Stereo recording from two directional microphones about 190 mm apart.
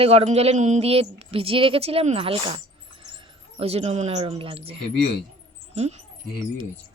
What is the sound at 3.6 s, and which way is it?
Speech, 30° right (ahead or behind).